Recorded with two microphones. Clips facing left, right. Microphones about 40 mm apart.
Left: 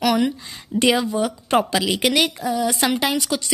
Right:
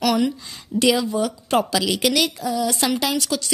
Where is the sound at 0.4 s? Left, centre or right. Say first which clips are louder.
Left 1 dB; centre.